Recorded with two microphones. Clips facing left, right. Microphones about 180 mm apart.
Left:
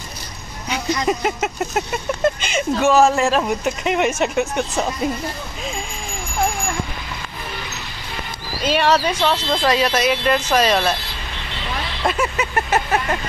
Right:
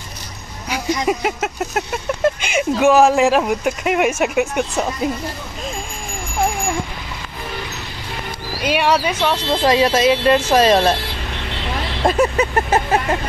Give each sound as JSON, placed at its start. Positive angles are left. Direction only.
{"t": 1.0, "sound": "speech", "side_deg": -5}
{"t": 8.6, "sound": "speech", "side_deg": -10}
{"t": 10.5, "sound": "vehicle", "side_deg": -30}
{"t": 12.1, "sound": "vehicle", "side_deg": -35}